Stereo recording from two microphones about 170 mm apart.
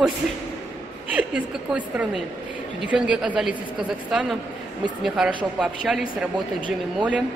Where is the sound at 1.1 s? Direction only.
5° right (ahead or behind).